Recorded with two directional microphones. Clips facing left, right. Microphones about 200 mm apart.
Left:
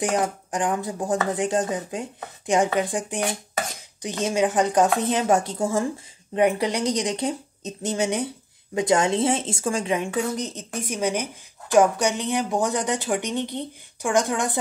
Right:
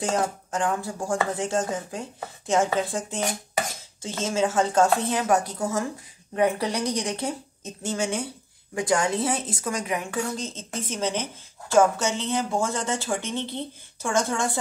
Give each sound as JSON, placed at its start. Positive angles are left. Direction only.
{"t": 0.0, "sound": "a woman's voice", "side_deg": 15}